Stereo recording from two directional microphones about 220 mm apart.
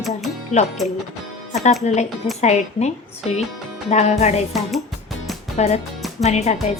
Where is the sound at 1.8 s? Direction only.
30° left (ahead or behind).